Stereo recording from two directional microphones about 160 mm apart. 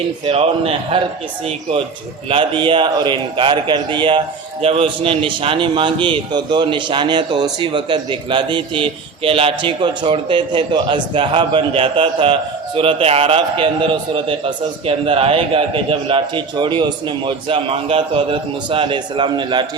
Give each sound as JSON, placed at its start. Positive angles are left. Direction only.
{"t": 0.3, "sound": "a man's voice", "side_deg": -35}
{"t": 2.3, "sound": "a man's voice", "side_deg": -30}